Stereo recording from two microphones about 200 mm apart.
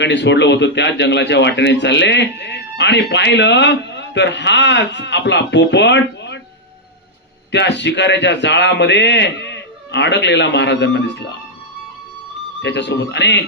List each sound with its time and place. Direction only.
0.0 s a man's voice: 60° left (ahead or behind)
7.5 s a man's voice: 60° left (ahead or behind)
12.6 s a man's voice: 60° left (ahead or behind)